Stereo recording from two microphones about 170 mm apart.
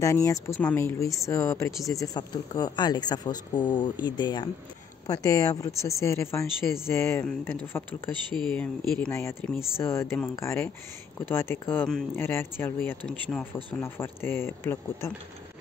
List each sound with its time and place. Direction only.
0.0 s speech: 20° left (ahead or behind)